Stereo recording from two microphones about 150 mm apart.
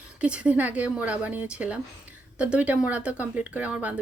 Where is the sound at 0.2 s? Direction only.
10° right (ahead or behind).